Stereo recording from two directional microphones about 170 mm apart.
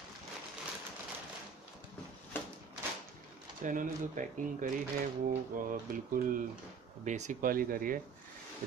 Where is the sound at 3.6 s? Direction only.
50° right (ahead or behind).